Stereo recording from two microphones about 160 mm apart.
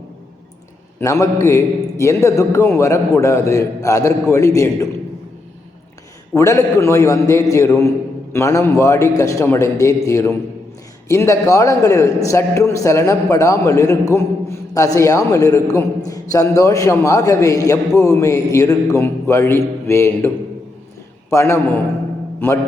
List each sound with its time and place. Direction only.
0.9 s a man's voice: 20° left (ahead or behind)
6.3 s a man's voice: 20° left (ahead or behind)